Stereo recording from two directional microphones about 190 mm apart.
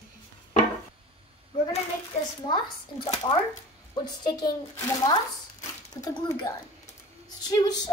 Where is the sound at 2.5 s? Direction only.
25° left (ahead or behind).